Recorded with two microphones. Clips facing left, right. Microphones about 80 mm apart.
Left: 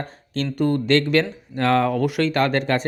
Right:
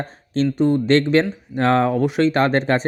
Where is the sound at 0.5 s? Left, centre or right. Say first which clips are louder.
Right 2 dB; centre.